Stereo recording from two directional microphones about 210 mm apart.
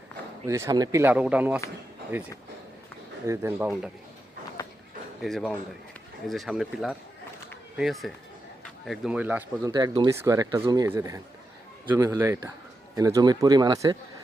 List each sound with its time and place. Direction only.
0.4 s speech: 15° right (ahead or behind)
5.2 s speech: centre (ahead or behind)
9.6 s speech: 20° right (ahead or behind)